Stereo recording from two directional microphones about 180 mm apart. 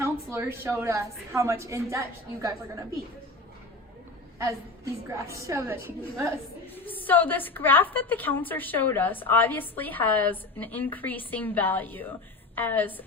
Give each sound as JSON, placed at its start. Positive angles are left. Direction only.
{"t": 0.0, "sound": "a woman's voice", "side_deg": -15}
{"t": 5.1, "sound": "a woman's voice", "side_deg": -15}
{"t": 6.7, "sound": "a woman's voice", "side_deg": 10}